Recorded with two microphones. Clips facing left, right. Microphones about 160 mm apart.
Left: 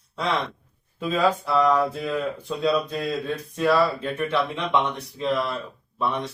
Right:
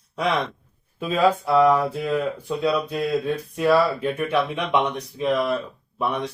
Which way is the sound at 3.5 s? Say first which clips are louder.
Right 2 dB; 10° right (ahead or behind).